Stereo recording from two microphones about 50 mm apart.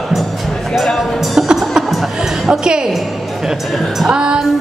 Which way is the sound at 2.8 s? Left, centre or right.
Centre.